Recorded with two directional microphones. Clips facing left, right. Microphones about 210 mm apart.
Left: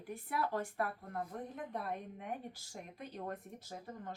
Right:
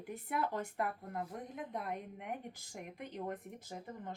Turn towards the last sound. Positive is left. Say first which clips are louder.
# right 2 dB
turn(degrees=-15)  # may be behind; listen again after turning